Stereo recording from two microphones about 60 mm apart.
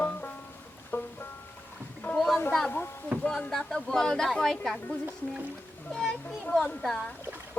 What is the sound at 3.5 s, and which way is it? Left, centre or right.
A man's voice, centre.